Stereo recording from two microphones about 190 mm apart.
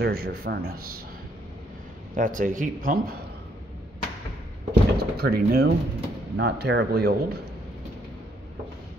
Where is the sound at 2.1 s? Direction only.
45° right (ahead or behind).